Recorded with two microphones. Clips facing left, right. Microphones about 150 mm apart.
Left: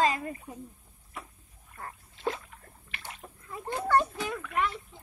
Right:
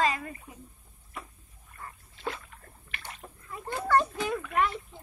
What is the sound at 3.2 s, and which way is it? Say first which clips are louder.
Splash: right 1 dB; centre (ahead or behind).